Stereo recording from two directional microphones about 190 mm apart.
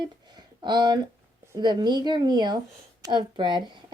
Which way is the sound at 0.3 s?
25° right (ahead or behind).